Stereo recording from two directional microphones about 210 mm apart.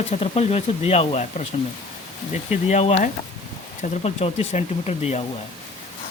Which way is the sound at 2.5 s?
30° left (ahead or behind).